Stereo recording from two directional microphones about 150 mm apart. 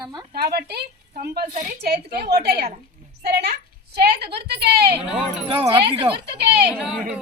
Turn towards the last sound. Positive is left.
turn(degrees=-10)  # may be behind; listen again after turning